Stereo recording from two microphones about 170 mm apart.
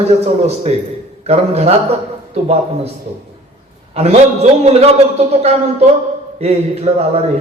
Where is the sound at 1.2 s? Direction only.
40° right (ahead or behind).